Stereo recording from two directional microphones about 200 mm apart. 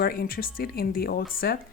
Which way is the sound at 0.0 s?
45° left (ahead or behind).